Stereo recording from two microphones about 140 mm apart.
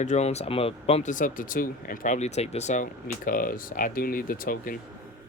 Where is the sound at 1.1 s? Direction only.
75° left (ahead or behind).